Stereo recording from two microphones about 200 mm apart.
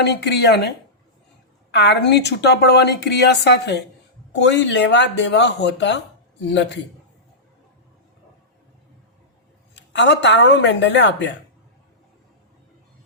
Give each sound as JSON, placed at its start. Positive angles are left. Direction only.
{"t": 0.0, "sound": "a woman's voice", "side_deg": 55}
{"t": 1.7, "sound": "a woman's voice", "side_deg": 55}
{"t": 9.7, "sound": "a woman's voice", "side_deg": 60}